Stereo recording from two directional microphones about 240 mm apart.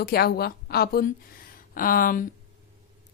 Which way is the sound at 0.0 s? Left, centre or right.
Left.